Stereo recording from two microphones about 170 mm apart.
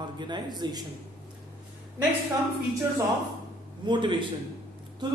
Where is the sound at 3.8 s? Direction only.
30° right (ahead or behind).